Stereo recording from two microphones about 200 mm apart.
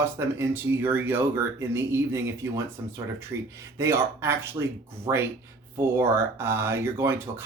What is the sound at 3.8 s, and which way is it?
Speech, 15° right (ahead or behind).